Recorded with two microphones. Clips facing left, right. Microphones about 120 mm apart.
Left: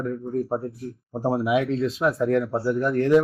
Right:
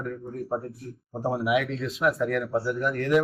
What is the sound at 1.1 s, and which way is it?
Speech, 25° left (ahead or behind).